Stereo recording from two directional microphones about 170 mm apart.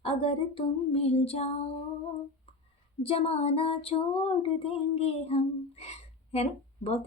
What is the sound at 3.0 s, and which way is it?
Female singing, 35° left (ahead or behind).